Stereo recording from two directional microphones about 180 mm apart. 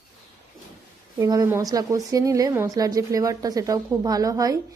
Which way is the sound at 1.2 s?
20° right (ahead or behind).